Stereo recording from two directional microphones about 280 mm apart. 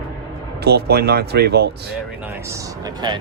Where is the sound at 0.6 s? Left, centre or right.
Right.